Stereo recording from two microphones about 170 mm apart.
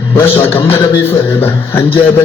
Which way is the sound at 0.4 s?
15° left (ahead or behind).